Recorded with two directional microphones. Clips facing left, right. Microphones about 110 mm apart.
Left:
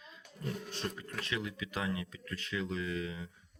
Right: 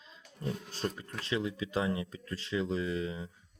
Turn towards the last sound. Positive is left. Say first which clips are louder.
# right 3 dB
turn(degrees=-30)  # may be behind; listen again after turning